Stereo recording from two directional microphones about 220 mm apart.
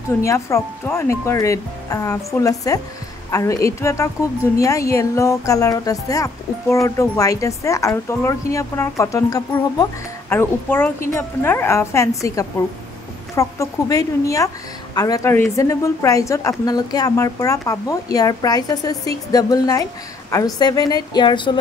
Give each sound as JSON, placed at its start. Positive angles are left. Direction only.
{"t": 0.2, "sound": "a woman's voice", "side_deg": 15}
{"t": 13.4, "sound": "a woman's voice", "side_deg": 15}